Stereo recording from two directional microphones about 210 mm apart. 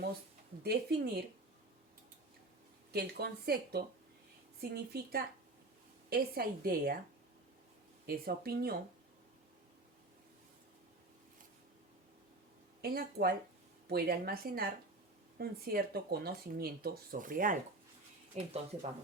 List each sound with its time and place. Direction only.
0.6 s speech: 50° right (ahead or behind)
2.9 s speech: 50° right (ahead or behind)
8.0 s speech: 45° right (ahead or behind)
12.8 s speech: 45° right (ahead or behind)
18.3 s speech: 30° right (ahead or behind)